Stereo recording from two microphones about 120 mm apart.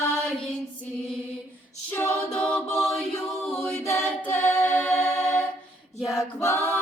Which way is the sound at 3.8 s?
25° left (ahead or behind).